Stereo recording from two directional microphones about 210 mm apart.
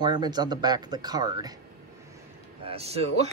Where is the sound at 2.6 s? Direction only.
30° right (ahead or behind).